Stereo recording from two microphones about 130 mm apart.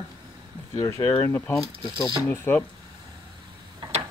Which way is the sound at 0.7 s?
25° left (ahead or behind).